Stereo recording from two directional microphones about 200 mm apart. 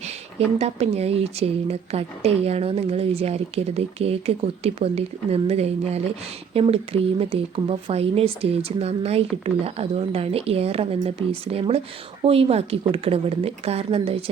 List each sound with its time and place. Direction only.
0.3 s speech: 30° right (ahead or behind)